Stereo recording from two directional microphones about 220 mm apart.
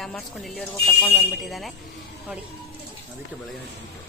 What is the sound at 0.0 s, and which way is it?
Speech, centre (ahead or behind).